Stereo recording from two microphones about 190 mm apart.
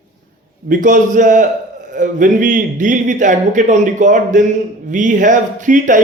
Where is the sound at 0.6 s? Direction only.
45° right (ahead or behind).